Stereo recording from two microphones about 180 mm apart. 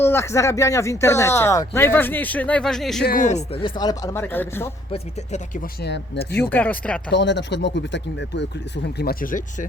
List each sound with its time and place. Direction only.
0.0 s speech: 15° left (ahead or behind)
3.0 s speech: 50° left (ahead or behind); by 4.7 s 10° left (ahead or behind)
4.9 s speech: 40° left (ahead or behind)
5.8 s speech: 65° left (ahead or behind)
6.3 s speech: 10° left (ahead or behind)
7.1 s speech: 75° left (ahead or behind); by 9.6 s 50° left (ahead or behind)